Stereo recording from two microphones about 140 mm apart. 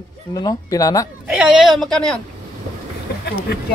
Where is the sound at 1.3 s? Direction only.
5° right (ahead or behind).